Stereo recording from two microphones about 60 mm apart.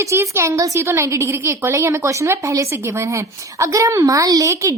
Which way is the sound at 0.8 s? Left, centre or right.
Right.